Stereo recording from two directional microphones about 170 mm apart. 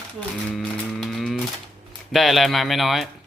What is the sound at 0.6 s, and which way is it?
Moo, 5° left (ahead or behind).